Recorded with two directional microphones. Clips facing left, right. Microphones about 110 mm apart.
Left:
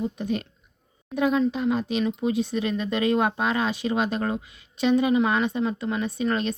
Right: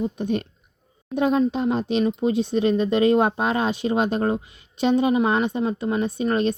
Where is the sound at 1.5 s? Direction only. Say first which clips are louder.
Right 3 dB; 30° right (ahead or behind).